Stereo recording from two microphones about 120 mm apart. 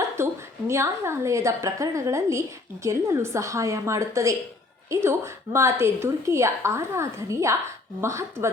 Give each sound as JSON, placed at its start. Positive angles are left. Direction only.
{"t": 0.2, "sound": "a woman's voice", "side_deg": -20}